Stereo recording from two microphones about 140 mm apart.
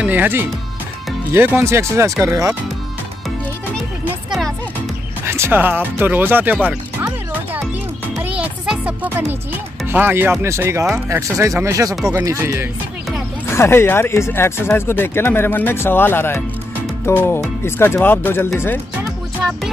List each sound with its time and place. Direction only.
0.0 s speech: 15° right (ahead or behind)
4.3 s music: centre (ahead or behind)
5.2 s speech: 15° right (ahead or behind)
8.2 s music: 10° right (ahead or behind)
9.8 s speech: 15° right (ahead or behind)
13.5 s speech: 15° left (ahead or behind)